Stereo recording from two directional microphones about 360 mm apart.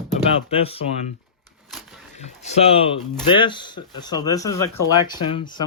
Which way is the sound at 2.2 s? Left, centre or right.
Centre.